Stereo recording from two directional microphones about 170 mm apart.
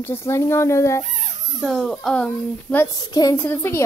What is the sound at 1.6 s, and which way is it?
A child's voice, centre (ahead or behind).